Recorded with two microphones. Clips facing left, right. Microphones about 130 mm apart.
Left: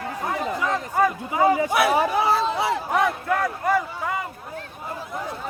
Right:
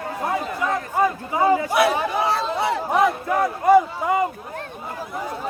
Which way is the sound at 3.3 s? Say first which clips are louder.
Right 5 dB; 20° right (ahead or behind).